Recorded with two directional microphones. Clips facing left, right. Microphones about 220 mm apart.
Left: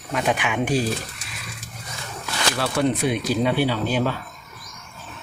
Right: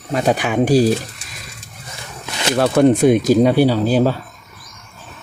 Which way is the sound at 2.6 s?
45° right (ahead or behind).